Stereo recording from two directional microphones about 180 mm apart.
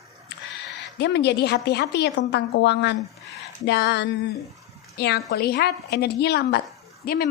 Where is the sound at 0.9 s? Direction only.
70° left (ahead or behind).